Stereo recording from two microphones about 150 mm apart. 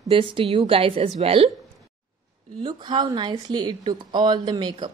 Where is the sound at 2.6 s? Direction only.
30° right (ahead or behind).